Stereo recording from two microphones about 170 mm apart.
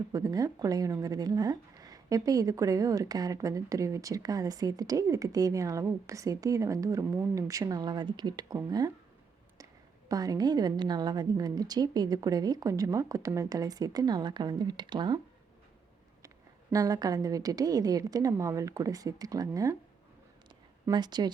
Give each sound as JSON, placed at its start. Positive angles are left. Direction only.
{"t": 0.1, "sound": "speech", "side_deg": -20}
{"t": 10.1, "sound": "speech", "side_deg": -20}
{"t": 16.7, "sound": "speech", "side_deg": -20}
{"t": 20.8, "sound": "speech", "side_deg": -25}